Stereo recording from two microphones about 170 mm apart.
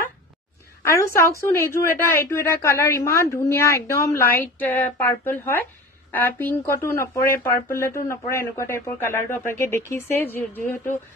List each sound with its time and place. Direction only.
0.8 s speech: 15° left (ahead or behind)